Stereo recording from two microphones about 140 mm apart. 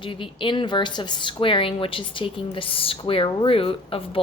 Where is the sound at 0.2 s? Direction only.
35° left (ahead or behind).